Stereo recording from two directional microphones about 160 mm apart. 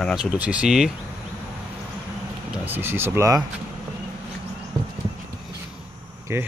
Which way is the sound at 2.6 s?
15° right (ahead or behind).